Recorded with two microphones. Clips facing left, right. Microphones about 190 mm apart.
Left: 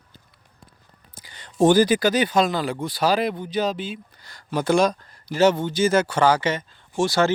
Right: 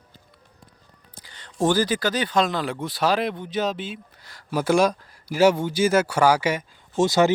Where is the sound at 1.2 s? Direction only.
10° left (ahead or behind).